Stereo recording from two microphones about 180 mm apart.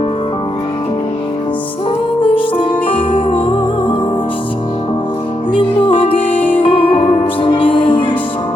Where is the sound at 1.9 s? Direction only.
30° left (ahead or behind).